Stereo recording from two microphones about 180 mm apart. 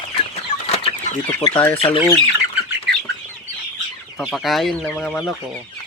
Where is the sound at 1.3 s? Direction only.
15° left (ahead or behind).